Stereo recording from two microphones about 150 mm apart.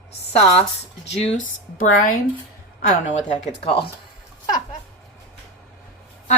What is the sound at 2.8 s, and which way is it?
Speech, 50° left (ahead or behind).